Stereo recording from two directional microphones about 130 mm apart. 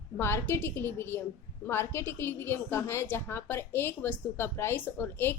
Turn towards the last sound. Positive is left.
turn(degrees=15)  # may be behind; listen again after turning